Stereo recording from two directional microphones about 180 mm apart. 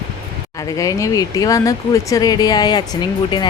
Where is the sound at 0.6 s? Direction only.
20° left (ahead or behind).